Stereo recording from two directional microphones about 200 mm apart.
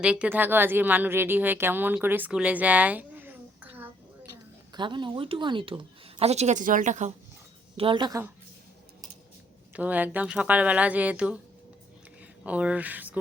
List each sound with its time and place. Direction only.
0.0 s a woman's voice: 5° right (ahead or behind)
4.7 s speech: 25° right (ahead or behind)
7.8 s speech: 25° right (ahead or behind)
9.7 s speech: 10° right (ahead or behind)
12.4 s speech: 5° right (ahead or behind)